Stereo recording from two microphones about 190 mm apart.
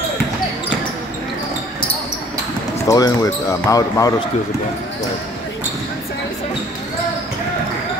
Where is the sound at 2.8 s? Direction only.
20° left (ahead or behind).